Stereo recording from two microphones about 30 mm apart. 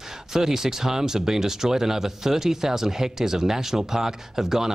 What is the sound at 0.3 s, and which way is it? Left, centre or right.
Speech, centre.